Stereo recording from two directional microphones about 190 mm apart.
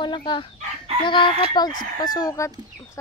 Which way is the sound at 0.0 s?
25° left (ahead or behind).